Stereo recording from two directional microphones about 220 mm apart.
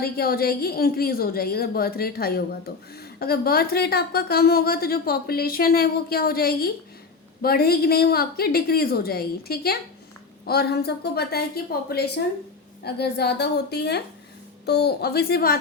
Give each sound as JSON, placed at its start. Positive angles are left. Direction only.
{"t": 0.0, "sound": "a woman's voice", "side_deg": 45}